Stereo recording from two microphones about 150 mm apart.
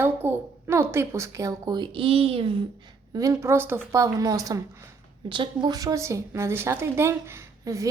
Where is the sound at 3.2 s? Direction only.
20° right (ahead or behind).